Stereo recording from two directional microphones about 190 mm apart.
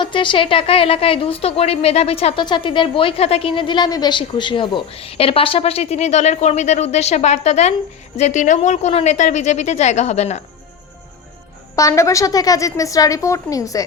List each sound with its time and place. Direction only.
0.0 s a woman's voice: 25° left (ahead or behind)
11.8 s a woman's voice: 15° left (ahead or behind)